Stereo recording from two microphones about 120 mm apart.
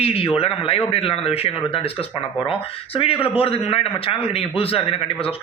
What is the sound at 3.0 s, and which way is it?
A man's voice, 50° left (ahead or behind).